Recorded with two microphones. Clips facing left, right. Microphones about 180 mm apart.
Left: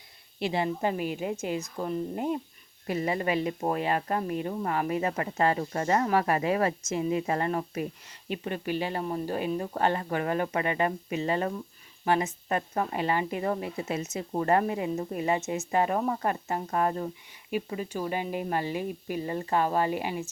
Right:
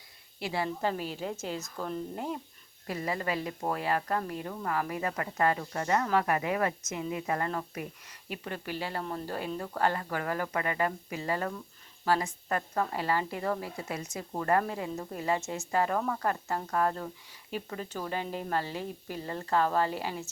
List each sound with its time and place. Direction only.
0.3 s a woman's voice: 20° left (ahead or behind)